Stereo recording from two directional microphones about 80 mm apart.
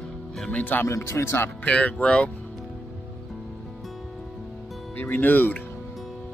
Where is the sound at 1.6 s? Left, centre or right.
Centre.